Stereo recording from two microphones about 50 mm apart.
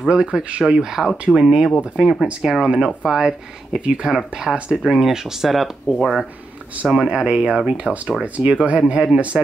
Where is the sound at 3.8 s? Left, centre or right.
Centre.